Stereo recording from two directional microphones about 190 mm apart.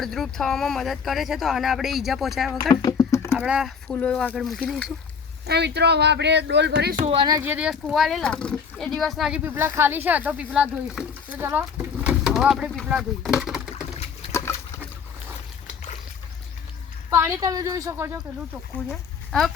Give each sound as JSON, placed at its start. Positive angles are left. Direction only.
{"t": 0.0, "sound": "speech", "side_deg": 0}
{"t": 2.6, "sound": "a sound", "side_deg": 20}
{"t": 3.3, "sound": "speech", "side_deg": -5}
{"t": 5.5, "sound": "speech", "side_deg": -60}
{"t": 7.0, "sound": "speech", "side_deg": -30}
{"t": 13.9, "sound": "a sound", "side_deg": 30}
{"t": 17.1, "sound": "a woman's voice", "side_deg": -15}
{"t": 18.9, "sound": "speech", "side_deg": 5}